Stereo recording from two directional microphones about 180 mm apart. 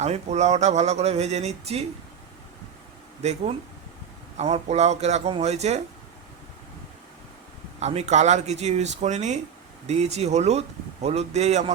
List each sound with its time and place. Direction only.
0.0 s speech: 40° right (ahead or behind)
3.2 s speech: 40° right (ahead or behind)
7.8 s speech: 35° right (ahead or behind)